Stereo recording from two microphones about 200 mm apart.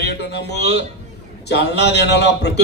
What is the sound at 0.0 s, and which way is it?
A man's voice, 55° left (ahead or behind).